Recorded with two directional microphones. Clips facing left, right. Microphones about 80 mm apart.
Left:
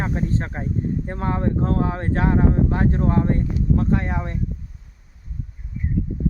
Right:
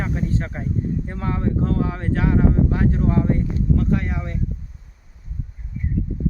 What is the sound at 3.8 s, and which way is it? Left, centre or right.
Speech, left.